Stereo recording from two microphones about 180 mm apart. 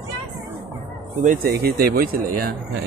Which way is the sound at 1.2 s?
55° right (ahead or behind).